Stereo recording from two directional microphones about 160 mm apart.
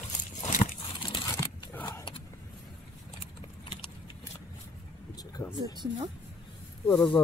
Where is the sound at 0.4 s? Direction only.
50° left (ahead or behind).